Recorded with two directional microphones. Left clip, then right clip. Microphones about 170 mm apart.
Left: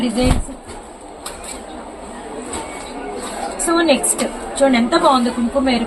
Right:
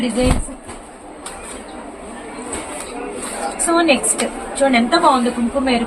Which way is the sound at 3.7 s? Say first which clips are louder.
Even; 15° right (ahead or behind).